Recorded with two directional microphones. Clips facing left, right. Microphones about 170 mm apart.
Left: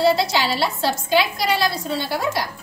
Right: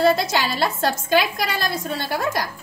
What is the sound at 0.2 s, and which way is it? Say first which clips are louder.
A woman's voice: left 1 dB; 50° right (ahead or behind).